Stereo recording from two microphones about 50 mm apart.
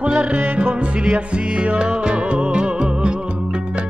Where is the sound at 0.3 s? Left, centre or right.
Right.